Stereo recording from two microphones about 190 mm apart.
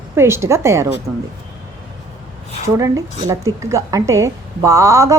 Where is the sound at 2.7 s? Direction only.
15° right (ahead or behind).